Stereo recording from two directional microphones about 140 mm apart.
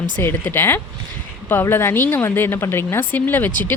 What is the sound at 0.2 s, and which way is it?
Speech, 15° left (ahead or behind).